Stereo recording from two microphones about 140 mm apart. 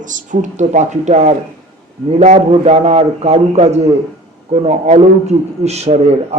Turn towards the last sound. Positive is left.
turn(degrees=-50)  # may be behind; listen again after turning